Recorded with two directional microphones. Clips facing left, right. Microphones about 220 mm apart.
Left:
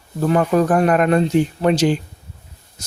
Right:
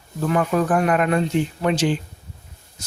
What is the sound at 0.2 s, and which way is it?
Speech, 40° left (ahead or behind).